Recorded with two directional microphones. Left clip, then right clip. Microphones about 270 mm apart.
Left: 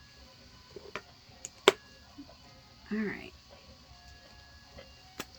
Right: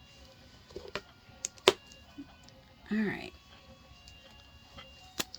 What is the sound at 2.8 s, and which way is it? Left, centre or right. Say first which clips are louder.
Speech: right 2 dB; right.